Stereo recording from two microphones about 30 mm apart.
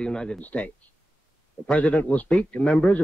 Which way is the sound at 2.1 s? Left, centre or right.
Left.